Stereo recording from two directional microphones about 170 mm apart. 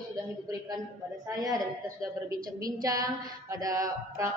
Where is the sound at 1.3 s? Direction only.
20° right (ahead or behind).